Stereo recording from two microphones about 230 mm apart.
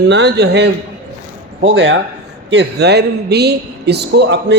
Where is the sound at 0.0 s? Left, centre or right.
Right.